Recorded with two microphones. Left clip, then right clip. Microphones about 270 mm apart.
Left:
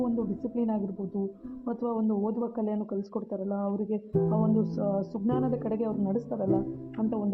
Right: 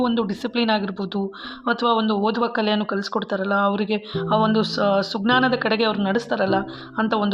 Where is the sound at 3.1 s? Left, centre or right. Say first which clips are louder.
Right 14 dB; right.